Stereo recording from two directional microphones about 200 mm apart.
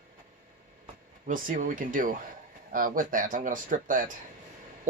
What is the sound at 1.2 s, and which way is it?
Speech, 40° right (ahead or behind).